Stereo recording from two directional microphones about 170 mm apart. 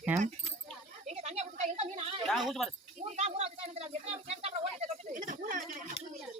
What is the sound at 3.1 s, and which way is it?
Speech, 40° right (ahead or behind).